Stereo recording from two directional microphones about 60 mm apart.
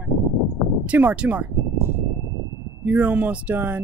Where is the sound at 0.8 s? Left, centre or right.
Right.